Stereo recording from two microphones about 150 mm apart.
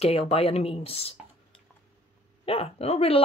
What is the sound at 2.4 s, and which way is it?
Speech, 40° left (ahead or behind).